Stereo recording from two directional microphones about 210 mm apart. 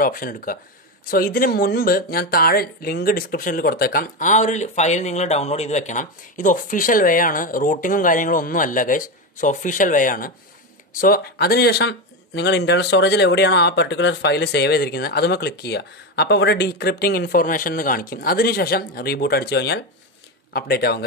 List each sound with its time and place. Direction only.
0.0 s speech: 40° left (ahead or behind)